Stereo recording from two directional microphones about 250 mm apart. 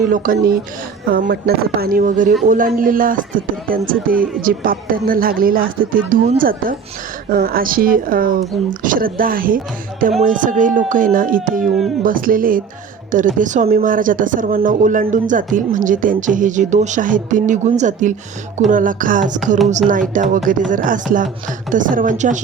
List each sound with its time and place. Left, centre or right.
0.1 s speech: right